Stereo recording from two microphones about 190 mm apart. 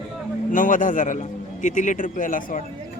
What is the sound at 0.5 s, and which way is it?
A man's voice, 45° left (ahead or behind).